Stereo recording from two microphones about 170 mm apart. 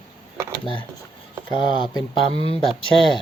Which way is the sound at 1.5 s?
30° left (ahead or behind).